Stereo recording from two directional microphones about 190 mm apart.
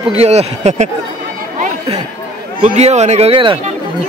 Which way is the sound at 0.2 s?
35° right (ahead or behind).